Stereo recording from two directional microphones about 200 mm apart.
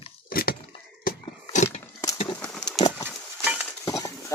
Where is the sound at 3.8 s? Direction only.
15° left (ahead or behind).